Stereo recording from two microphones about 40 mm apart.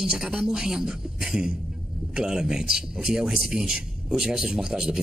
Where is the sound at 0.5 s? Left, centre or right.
Centre.